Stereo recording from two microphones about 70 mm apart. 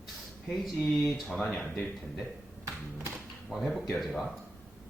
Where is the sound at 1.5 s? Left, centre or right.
Left.